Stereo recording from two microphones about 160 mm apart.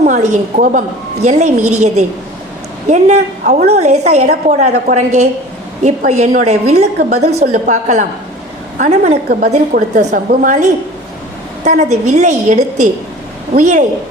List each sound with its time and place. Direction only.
0.0 s a woman's voice: 50° right (ahead or behind)